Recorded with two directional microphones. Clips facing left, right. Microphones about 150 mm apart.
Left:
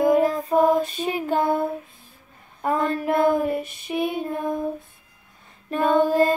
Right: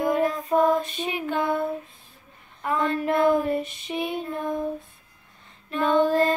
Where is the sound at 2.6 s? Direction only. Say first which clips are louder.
Left 3 dB; 40° left (ahead or behind).